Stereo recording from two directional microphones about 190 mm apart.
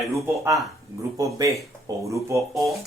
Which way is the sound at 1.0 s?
15° right (ahead or behind).